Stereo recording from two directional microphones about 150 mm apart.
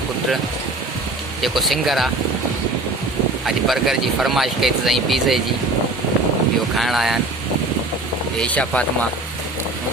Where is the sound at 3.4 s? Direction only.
Centre (ahead or behind).